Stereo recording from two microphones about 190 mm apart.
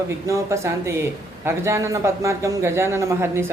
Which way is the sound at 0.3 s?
15° right (ahead or behind).